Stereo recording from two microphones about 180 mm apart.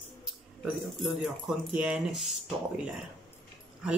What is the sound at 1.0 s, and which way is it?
Speech, 5° right (ahead or behind).